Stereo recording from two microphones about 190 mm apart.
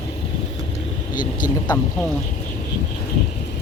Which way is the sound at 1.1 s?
25° left (ahead or behind).